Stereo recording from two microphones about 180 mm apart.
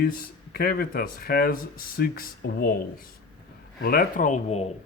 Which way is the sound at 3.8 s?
55° left (ahead or behind).